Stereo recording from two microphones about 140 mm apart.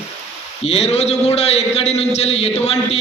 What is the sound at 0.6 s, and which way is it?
A man's voice, 45° left (ahead or behind).